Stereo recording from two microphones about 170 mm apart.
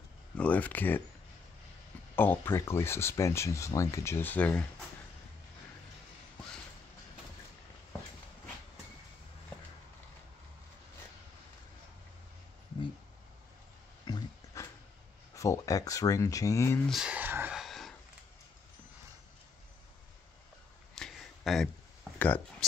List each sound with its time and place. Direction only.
0.4 s speech: 10° left (ahead or behind)
2.1 s speech: 10° left (ahead or behind)
14.0 s pig: 20° left (ahead or behind)
15.3 s speech: 20° left (ahead or behind)
16.8 s a sound: centre (ahead or behind)
20.9 s a sound: centre (ahead or behind)
22.2 s speech: 10° left (ahead or behind)